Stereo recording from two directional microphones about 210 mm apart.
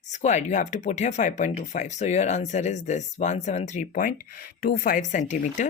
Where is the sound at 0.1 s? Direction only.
35° left (ahead or behind).